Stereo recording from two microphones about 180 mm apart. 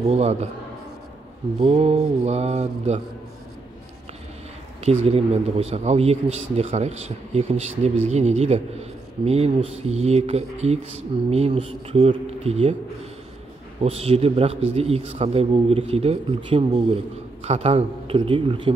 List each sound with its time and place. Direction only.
0.1 s speech: 35° right (ahead or behind)
1.6 s speech: 35° right (ahead or behind)
5.0 s speech: 35° right (ahead or behind)
13.8 s speech: 35° right (ahead or behind)